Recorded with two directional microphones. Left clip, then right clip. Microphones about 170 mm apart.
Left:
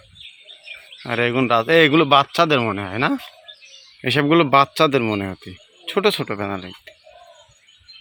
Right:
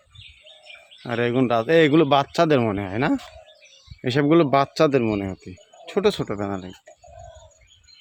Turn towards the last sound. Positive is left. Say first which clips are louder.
# left 3 dB
turn(degrees=-10)  # may be behind; listen again after turning